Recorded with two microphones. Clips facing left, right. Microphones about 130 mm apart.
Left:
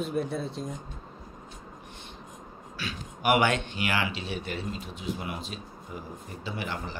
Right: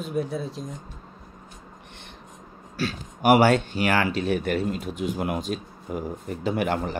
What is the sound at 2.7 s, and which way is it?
Speech, 40° right (ahead or behind).